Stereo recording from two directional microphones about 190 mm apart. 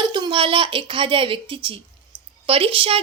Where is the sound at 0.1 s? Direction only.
25° right (ahead or behind).